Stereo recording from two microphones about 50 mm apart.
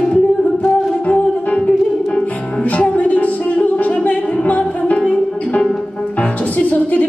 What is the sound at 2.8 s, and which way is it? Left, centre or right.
Music, left.